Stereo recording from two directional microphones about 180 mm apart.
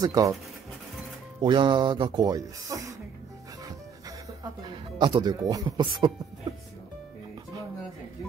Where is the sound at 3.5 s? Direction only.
20° right (ahead or behind).